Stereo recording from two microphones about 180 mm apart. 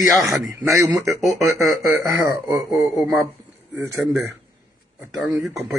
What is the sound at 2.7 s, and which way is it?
Speech, centre (ahead or behind).